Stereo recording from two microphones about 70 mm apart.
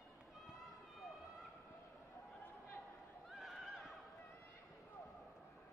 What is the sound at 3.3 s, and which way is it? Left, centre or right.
Neigh, centre.